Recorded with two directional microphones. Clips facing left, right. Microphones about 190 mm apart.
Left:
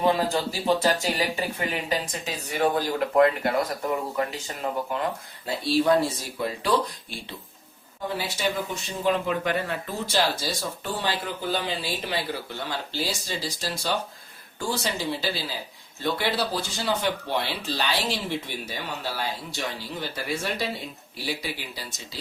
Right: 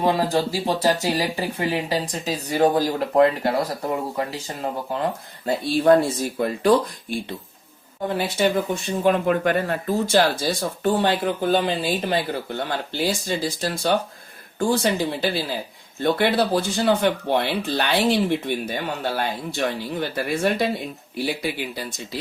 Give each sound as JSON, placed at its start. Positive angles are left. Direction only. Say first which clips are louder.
{"t": 0.3, "sound": "speech", "louder": "right 2 dB", "side_deg": -30}
{"t": 1.5, "sound": "speech", "louder": "right 4 dB", "side_deg": -35}
{"t": 5.5, "sound": "speech", "louder": "right 5 dB", "side_deg": -55}